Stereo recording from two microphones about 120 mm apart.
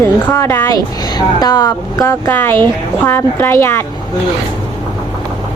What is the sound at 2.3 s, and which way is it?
A woman's voice, 15° left (ahead or behind).